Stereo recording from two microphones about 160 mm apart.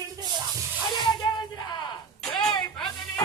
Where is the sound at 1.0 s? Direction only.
25° left (ahead or behind).